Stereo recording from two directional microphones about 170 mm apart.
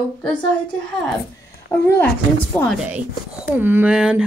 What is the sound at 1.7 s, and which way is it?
Speech, 10° left (ahead or behind).